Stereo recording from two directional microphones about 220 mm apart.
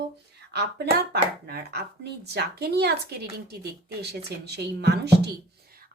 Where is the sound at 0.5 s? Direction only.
45° right (ahead or behind).